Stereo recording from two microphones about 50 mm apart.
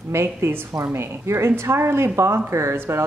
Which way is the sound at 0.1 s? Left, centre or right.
Right.